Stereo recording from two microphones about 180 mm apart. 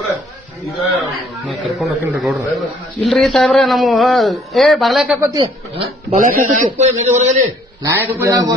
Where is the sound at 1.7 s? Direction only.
Centre (ahead or behind).